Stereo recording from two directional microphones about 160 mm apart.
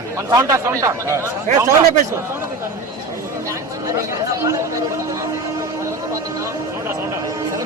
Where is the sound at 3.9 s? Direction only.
20° right (ahead or behind).